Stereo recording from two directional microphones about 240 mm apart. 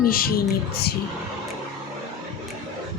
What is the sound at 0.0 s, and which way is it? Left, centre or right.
Speech, left.